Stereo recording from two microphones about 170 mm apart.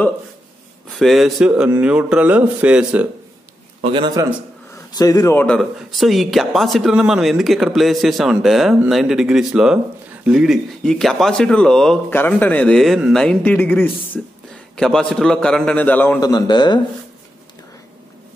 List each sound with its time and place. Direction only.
0.9 s speech: centre (ahead or behind)
3.8 s a man's voice: 30° right (ahead or behind)
4.9 s speech: 20° left (ahead or behind)
16.2 s a man's voice: 25° left (ahead or behind)